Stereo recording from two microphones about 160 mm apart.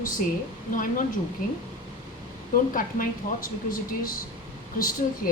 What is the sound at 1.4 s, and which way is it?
Speech, 65° left (ahead or behind).